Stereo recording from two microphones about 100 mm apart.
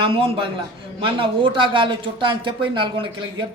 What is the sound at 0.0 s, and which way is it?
A man's voice, 70° right (ahead or behind).